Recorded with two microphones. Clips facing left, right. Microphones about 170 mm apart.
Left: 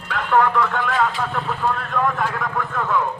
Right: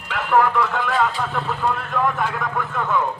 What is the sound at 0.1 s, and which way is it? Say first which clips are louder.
A man's voice: even; 5° right (ahead or behind).